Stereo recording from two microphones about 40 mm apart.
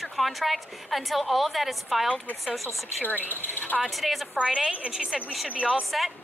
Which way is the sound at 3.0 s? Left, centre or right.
Left.